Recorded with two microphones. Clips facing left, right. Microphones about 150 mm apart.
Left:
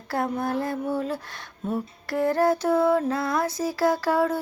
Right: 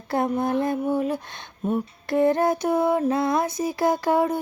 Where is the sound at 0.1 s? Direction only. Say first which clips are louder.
Right 3 dB; 20° right (ahead or behind).